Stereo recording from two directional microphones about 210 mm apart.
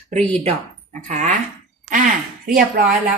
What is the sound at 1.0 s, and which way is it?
Speech, 35° right (ahead or behind).